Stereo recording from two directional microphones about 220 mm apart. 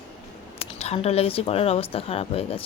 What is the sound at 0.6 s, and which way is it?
Speech, 30° left (ahead or behind).